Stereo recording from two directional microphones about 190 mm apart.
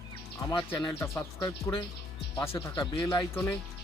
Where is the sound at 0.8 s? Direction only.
20° left (ahead or behind).